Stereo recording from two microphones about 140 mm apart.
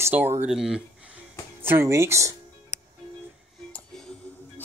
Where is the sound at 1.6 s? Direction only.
15° right (ahead or behind).